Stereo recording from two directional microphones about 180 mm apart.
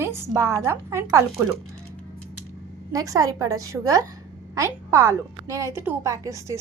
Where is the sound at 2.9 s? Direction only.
20° right (ahead or behind).